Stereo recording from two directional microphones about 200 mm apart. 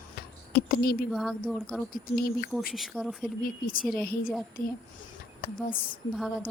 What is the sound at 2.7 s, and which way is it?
Speech, centre (ahead or behind).